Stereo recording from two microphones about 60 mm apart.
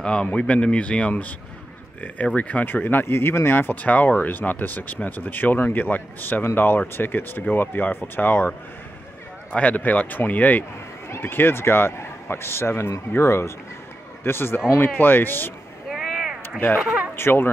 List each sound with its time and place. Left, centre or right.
0.0 s speech: centre
2.3 s speech: left
3.8 s speech: left
11.1 s speech: left
15.9 s vehicle: centre
16.4 s a sound: left
17.1 s speech: left